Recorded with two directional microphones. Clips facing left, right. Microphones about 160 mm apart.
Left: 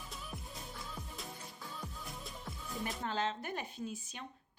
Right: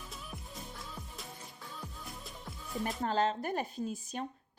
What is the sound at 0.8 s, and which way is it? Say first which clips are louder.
Music: even; centre (ahead or behind).